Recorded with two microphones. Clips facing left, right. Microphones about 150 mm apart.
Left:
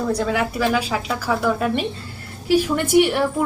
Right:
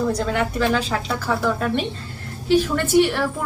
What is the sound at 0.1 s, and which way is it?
Speech, 10° left (ahead or behind).